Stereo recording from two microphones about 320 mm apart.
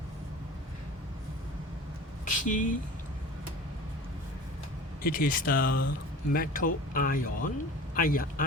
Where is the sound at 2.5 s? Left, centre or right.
Left.